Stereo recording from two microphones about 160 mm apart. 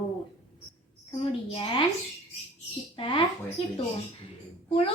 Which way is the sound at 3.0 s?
35° left (ahead or behind).